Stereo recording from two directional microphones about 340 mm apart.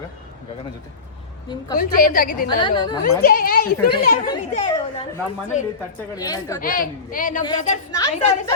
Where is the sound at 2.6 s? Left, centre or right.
Centre.